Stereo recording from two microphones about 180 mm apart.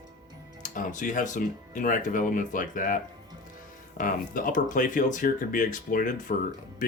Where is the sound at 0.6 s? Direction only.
45° left (ahead or behind).